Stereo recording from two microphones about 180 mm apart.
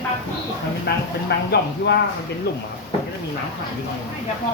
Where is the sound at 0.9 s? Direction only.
65° left (ahead or behind).